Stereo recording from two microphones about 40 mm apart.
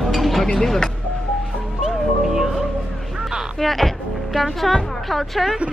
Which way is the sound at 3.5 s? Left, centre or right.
Centre.